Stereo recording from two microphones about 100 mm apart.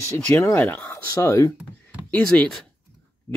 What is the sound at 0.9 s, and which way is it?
Speech, 30° left (ahead or behind).